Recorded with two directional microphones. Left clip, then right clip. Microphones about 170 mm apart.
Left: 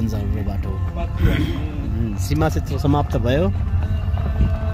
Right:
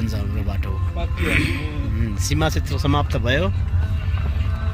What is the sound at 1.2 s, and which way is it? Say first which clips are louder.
A man's voice: right 4 dB; 10° left (ahead or behind).